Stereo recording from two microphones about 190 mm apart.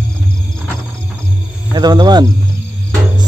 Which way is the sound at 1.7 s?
20° right (ahead or behind).